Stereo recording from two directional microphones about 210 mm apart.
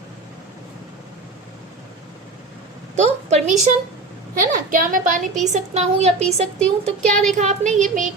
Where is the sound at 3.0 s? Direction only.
30° right (ahead or behind).